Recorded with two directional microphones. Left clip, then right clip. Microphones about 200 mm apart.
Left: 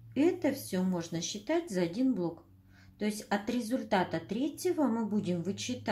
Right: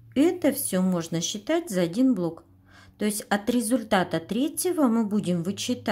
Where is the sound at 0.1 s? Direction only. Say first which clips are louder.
Right 7 dB; 40° right (ahead or behind).